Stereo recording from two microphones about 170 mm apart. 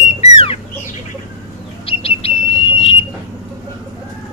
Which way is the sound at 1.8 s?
35° left (ahead or behind).